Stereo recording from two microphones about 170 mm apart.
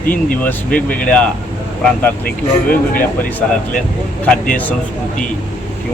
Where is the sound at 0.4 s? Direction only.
10° left (ahead or behind).